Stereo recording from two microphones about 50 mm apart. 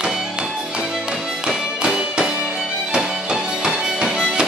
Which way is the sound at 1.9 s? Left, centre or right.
Centre.